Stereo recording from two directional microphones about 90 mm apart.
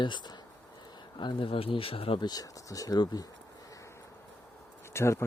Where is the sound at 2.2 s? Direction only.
50° left (ahead or behind).